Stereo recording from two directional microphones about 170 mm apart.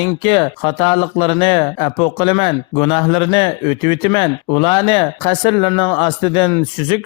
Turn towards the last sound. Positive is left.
turn(degrees=25)  # may be behind; listen again after turning